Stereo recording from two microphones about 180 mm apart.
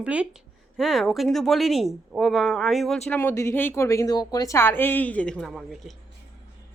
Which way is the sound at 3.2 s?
15° left (ahead or behind).